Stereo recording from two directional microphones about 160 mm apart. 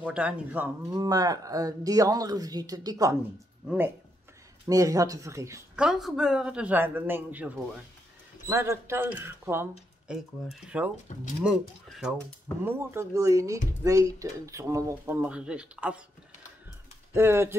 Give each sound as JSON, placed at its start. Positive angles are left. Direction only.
{"t": 0.0, "sound": "a man's voice", "side_deg": -5}
{"t": 0.9, "sound": "a man's voice", "side_deg": -20}
{"t": 5.8, "sound": "a man's voice", "side_deg": -5}
{"t": 10.1, "sound": "speech", "side_deg": -5}
{"t": 11.1, "sound": "speech", "side_deg": 45}
{"t": 11.4, "sound": "speech", "side_deg": -5}
{"t": 12.6, "sound": "speech", "side_deg": -15}
{"t": 17.1, "sound": "a man's voice", "side_deg": -15}